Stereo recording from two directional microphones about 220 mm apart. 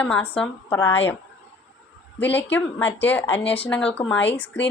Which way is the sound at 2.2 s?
10° left (ahead or behind).